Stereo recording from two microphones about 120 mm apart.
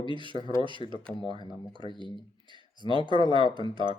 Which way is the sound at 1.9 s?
40° right (ahead or behind).